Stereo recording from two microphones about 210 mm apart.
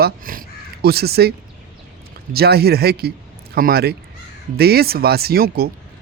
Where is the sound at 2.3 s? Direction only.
50° right (ahead or behind).